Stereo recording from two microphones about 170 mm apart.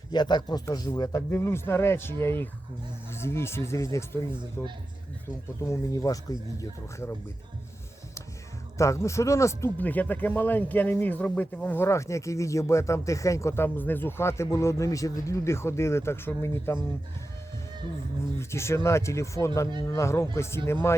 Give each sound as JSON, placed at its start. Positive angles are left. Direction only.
{"t": 0.1, "sound": "speech", "side_deg": 25}
{"t": 8.8, "sound": "speech", "side_deg": 15}
{"t": 18.3, "sound": "speech", "side_deg": 15}